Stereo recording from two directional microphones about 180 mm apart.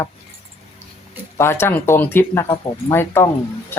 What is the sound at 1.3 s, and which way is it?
Speech, 15° left (ahead or behind).